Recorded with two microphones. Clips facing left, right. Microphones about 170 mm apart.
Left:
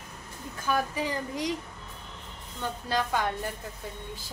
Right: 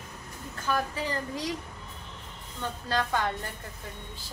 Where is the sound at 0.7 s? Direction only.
10° left (ahead or behind).